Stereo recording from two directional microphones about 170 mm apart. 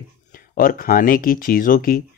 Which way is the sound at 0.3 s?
55° left (ahead or behind).